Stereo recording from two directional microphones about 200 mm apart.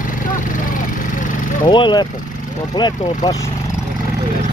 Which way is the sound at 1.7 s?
20° left (ahead or behind).